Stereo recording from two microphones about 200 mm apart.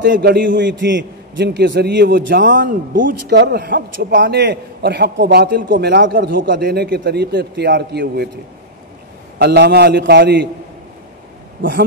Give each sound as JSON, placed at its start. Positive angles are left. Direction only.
{"t": 0.0, "sound": "a man's voice", "side_deg": -50}
{"t": 2.4, "sound": "a man's voice", "side_deg": -65}
{"t": 3.0, "sound": "a man's voice", "side_deg": -45}
{"t": 3.3, "sound": "a man's voice", "side_deg": -55}
{"t": 9.4, "sound": "a man's voice", "side_deg": -55}